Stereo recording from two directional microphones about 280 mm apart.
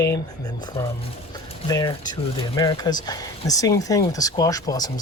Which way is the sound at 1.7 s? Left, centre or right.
Centre.